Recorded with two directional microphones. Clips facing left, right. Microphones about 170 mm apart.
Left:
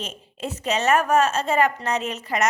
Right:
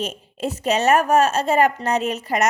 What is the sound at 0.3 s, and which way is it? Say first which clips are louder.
A woman's voice: right 4 dB; 40° right (ahead or behind).